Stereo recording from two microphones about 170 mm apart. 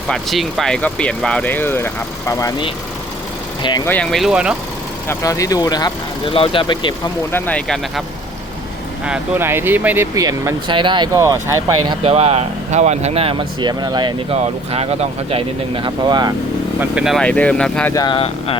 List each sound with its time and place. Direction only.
0.1 s speech: centre (ahead or behind); by 3.8 s 25° left (ahead or behind)
3.8 s speech: 5° left (ahead or behind)
5.0 s speech: 20° left (ahead or behind)
7.3 s speech: 10° left (ahead or behind)
9.0 s speech: 10° right (ahead or behind)
12.0 s speech: 40° right (ahead or behind)
16.9 s speech: 5° right (ahead or behind)
17.9 s speech: 25° left (ahead or behind)